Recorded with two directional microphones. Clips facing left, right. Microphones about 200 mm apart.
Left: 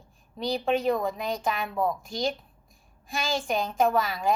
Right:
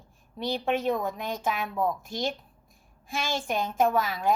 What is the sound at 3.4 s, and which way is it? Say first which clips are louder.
Speech: even; 5° right (ahead or behind).